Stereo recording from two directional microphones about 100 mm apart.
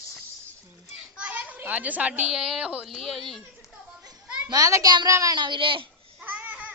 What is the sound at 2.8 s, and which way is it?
Speech, centre (ahead or behind).